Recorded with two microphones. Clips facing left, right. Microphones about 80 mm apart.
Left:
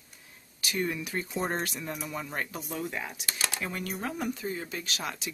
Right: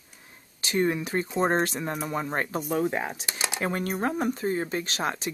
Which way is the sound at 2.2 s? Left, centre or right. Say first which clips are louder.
Right 7 dB; right.